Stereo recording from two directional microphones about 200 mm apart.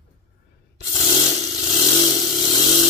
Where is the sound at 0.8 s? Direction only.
20° left (ahead or behind).